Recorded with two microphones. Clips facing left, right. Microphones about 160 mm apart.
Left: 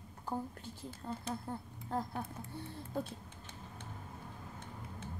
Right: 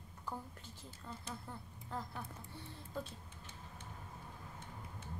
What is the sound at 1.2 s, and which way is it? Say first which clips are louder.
Speech: left 7 dB; 40° left (ahead or behind).